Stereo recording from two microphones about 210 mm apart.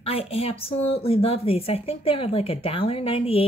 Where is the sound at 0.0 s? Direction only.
30° left (ahead or behind).